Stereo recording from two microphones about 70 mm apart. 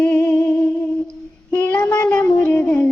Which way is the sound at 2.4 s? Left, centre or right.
Left.